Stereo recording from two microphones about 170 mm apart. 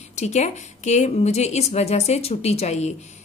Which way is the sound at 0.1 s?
45° left (ahead or behind).